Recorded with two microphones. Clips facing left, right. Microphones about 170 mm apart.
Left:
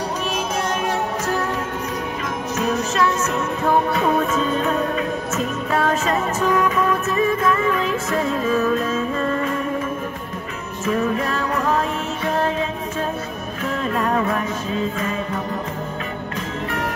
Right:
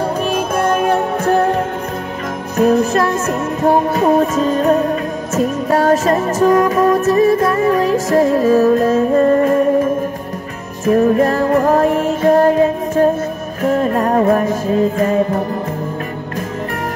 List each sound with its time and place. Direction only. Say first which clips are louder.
0.0 s music: right 7 dB; 55° right (ahead or behind)
10.9 s music: right 9 dB; 45° right (ahead or behind)